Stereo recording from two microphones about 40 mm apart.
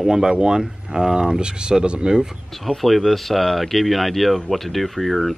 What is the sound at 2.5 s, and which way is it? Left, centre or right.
Speech, centre.